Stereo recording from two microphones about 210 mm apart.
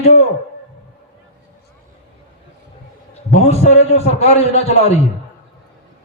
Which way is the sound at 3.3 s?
30° left (ahead or behind).